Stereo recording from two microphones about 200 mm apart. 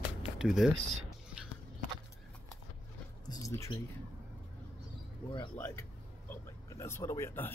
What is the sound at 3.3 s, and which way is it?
Speech, 15° left (ahead or behind).